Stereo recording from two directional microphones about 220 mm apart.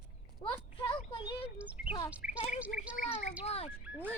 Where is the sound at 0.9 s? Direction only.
20° left (ahead or behind).